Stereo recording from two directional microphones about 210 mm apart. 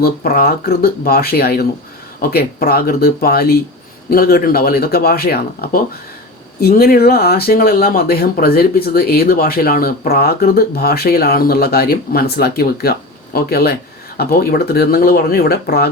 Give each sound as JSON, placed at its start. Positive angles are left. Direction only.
{"t": 0.0, "sound": "speech", "side_deg": 45}